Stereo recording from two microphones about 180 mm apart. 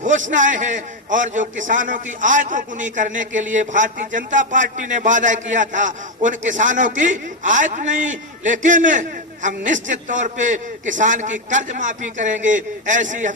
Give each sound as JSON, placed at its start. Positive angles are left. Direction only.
{"t": 0.0, "sound": "a man's voice", "side_deg": -45}